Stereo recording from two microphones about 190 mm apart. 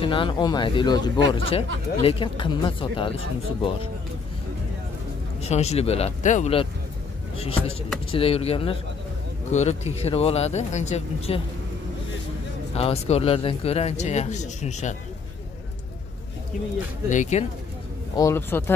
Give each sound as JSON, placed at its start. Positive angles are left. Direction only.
{"t": 0.0, "sound": "speech", "side_deg": 25}
{"t": 5.4, "sound": "speech", "side_deg": 35}
{"t": 12.7, "sound": "speech", "side_deg": 30}
{"t": 17.1, "sound": "speech", "side_deg": 40}
{"t": 18.1, "sound": "speech", "side_deg": 15}